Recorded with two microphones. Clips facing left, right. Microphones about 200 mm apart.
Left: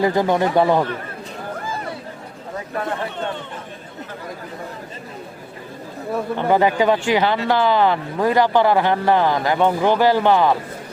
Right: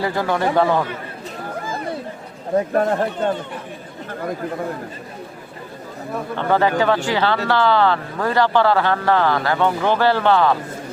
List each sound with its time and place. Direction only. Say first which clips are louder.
0.0 s speech: left 3 dB; 15° left (ahead or behind)
2.7 s speech: right 6 dB; 45° right (ahead or behind)
6.3 s speech: left 1 dB; 15° left (ahead or behind)